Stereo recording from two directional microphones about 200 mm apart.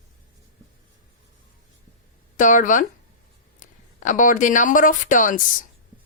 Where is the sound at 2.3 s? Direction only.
40° left (ahead or behind).